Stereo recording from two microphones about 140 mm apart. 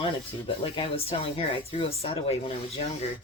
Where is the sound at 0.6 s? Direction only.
40° left (ahead or behind).